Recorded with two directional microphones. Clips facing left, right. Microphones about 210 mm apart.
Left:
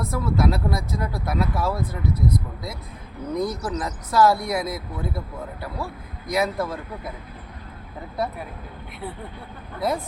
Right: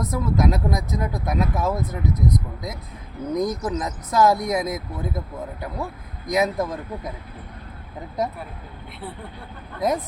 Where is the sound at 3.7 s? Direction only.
20° right (ahead or behind).